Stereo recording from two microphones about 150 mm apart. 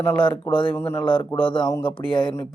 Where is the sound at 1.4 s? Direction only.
35° left (ahead or behind).